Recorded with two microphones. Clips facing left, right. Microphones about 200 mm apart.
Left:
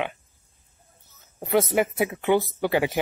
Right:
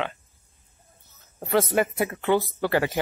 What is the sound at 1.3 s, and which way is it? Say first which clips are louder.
Speech: left 1 dB; 15° left (ahead or behind).